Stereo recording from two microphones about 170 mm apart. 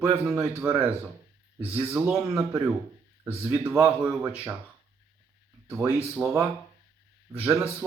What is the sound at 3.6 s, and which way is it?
Speech, 10° right (ahead or behind).